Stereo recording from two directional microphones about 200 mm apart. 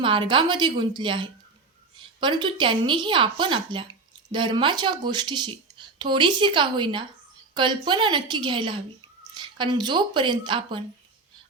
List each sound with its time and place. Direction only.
0.0 s a woman's voice: 25° right (ahead or behind)